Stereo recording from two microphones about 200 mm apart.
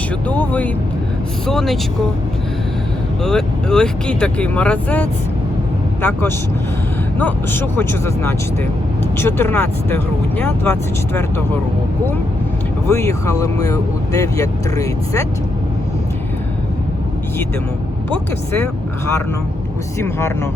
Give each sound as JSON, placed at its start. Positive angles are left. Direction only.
{"t": 0.3, "sound": "speech", "side_deg": 10}
{"t": 3.2, "sound": "speech", "side_deg": 5}
{"t": 12.9, "sound": "speech", "side_deg": 15}
{"t": 18.1, "sound": "speech", "side_deg": 10}